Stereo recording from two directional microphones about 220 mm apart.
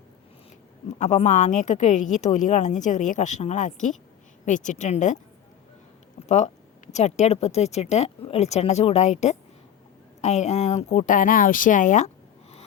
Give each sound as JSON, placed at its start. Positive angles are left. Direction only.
{"t": 0.9, "sound": "a woman's voice", "side_deg": 30}
{"t": 6.2, "sound": "speech", "side_deg": 30}